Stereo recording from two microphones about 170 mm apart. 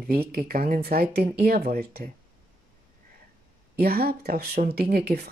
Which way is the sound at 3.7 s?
65° right (ahead or behind).